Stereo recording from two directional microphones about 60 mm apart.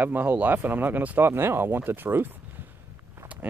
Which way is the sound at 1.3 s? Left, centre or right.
Right.